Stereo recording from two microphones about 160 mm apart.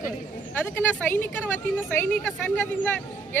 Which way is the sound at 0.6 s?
10° left (ahead or behind).